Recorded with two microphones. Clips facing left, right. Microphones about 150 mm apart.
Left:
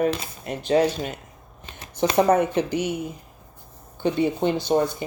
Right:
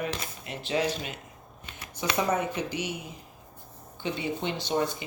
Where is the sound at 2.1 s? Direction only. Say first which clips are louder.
Left 9 dB; 55° left (ahead or behind).